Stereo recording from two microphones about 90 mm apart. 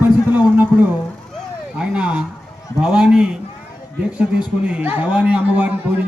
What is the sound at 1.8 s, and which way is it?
A man's voice, 10° right (ahead or behind).